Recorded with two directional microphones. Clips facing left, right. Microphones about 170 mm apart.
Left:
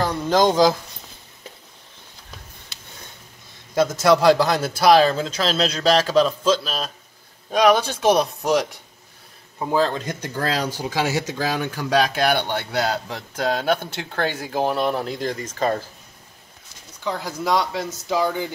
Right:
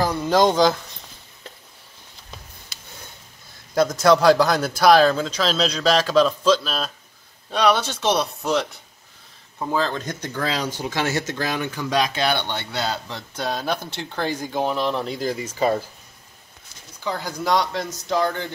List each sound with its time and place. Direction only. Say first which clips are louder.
0.0 s speech: even; centre (ahead or behind)
3.7 s speech: even; centre (ahead or behind)
9.6 s speech: left 3 dB; 10° left (ahead or behind); by 15.8 s 10° right (ahead or behind)
17.0 s speech: left 1 dB; centre (ahead or behind)